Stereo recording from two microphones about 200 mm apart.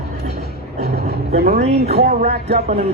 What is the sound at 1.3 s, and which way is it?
Speech, 50° right (ahead or behind).